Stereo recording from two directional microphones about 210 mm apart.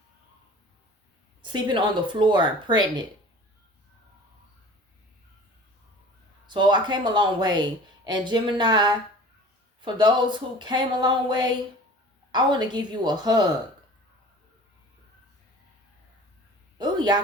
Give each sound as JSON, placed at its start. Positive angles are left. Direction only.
{"t": 1.4, "sound": "speech", "side_deg": -20}
{"t": 6.5, "sound": "speech", "side_deg": -20}
{"t": 16.7, "sound": "a sound", "side_deg": -20}